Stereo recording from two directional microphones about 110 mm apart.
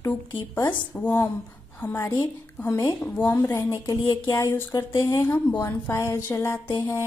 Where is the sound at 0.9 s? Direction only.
20° left (ahead or behind).